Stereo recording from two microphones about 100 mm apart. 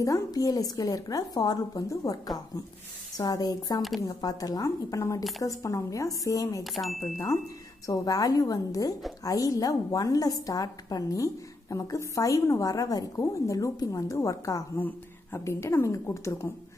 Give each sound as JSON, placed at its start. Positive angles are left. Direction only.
{"t": 0.0, "sound": "a woman's voice", "side_deg": 35}
{"t": 6.6, "sound": "speech", "side_deg": 0}
{"t": 7.8, "sound": "a woman's voice", "side_deg": 35}